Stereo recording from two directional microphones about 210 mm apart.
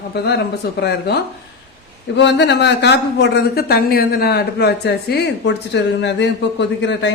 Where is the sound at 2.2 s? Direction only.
55° left (ahead or behind).